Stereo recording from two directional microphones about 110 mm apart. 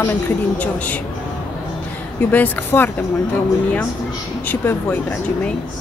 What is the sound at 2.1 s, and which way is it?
Speech, 15° left (ahead or behind).